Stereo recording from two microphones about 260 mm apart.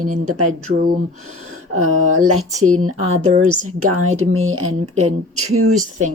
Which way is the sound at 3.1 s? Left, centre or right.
Right.